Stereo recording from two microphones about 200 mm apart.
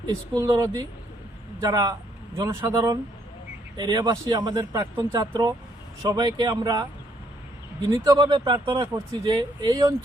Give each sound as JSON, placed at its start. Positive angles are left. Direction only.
{"t": 0.3, "sound": "a man's voice", "side_deg": -15}